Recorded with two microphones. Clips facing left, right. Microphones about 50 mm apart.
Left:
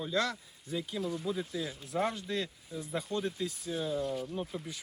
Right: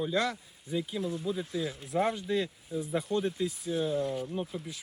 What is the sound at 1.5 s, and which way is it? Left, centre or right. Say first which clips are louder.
Speech: right 4 dB; centre.